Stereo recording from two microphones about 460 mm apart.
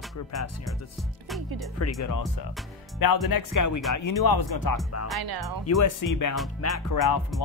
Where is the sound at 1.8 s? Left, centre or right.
Left.